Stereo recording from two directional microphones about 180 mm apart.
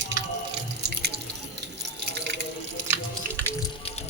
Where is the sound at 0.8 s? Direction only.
65° right (ahead or behind).